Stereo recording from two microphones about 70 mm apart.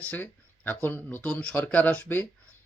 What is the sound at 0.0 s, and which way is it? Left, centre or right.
Speech, left.